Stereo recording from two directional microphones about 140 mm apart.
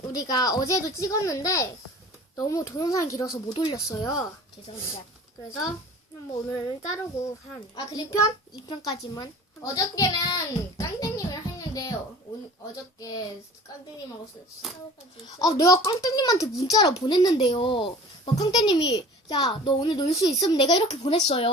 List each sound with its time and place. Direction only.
0.1 s speech: 30° left (ahead or behind)
6.7 s speech: 20° left (ahead or behind)
9.7 s a sound: 25° left (ahead or behind)
12.7 s speech: 25° left (ahead or behind)
15.4 s a child's voice: 25° left (ahead or behind)